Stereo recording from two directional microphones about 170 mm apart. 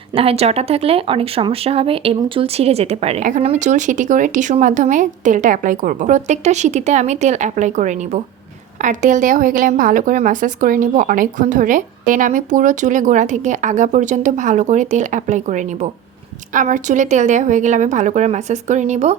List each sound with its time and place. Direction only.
0.1 s speech: 35° right (ahead or behind)